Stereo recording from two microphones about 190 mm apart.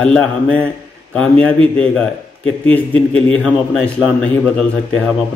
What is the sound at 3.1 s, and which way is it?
A man's voice, 5° left (ahead or behind).